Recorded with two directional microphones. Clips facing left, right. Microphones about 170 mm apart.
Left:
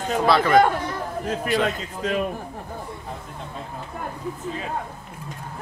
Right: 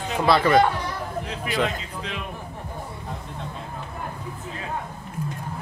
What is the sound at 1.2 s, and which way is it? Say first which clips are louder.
A man's voice: left 4 dB; 45° left (ahead or behind).